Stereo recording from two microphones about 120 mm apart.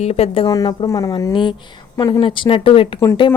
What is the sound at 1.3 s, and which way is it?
Speech, 45° left (ahead or behind).